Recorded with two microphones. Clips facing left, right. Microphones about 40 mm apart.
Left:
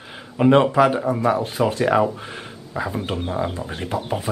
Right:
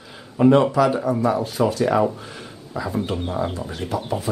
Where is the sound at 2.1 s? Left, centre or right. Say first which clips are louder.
Left 2 dB; left.